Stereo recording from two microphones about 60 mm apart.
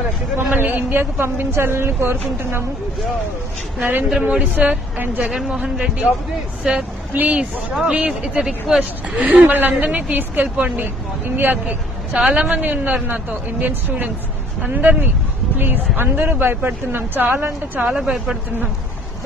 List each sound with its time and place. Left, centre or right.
0.5 s speech: right
4.2 s a man's voice: right
5.3 s speech: centre
7.2 s a man's voice: right
17.9 s speech: centre